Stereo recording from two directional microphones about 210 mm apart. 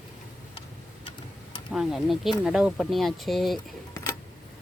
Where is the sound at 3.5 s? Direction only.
15° left (ahead or behind).